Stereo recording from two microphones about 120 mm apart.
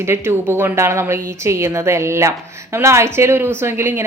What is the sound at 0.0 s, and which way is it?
Speech, 20° right (ahead or behind).